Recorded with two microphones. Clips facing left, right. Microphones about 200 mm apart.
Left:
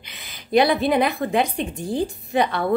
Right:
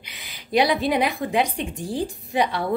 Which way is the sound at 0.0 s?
10° right (ahead or behind).